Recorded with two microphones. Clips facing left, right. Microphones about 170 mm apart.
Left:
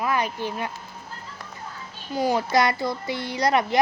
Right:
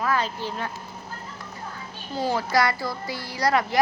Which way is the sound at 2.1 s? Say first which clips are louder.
Left 2 dB; 15° left (ahead or behind).